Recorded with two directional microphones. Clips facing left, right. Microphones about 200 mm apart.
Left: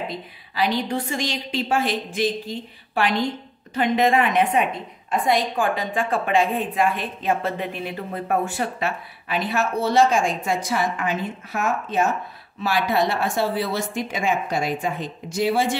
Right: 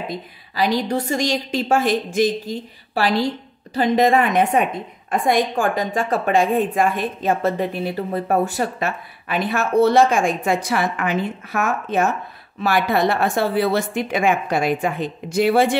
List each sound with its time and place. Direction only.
0.6 s a woman's voice: 40° right (ahead or behind); by 15.8 s 60° right (ahead or behind)